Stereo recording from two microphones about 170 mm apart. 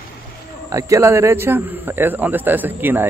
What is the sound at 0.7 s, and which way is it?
Speech, 20° right (ahead or behind).